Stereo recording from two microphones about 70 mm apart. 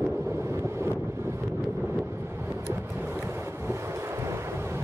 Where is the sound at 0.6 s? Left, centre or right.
Right.